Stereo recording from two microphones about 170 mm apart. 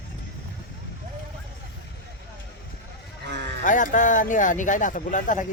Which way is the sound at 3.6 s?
50° left (ahead or behind).